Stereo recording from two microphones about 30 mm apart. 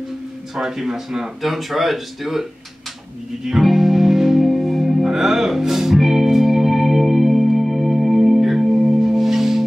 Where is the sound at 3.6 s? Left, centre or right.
Centre.